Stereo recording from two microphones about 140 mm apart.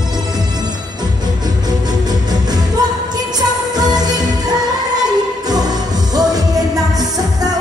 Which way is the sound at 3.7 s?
30° right (ahead or behind).